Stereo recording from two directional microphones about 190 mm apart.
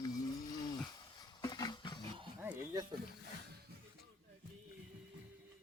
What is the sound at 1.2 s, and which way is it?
Roaring cats, 20° left (ahead or behind).